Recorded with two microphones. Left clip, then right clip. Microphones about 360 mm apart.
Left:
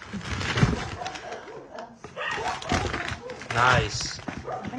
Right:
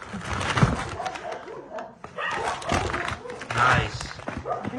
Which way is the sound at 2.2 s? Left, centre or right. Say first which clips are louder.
Right 2 dB; centre.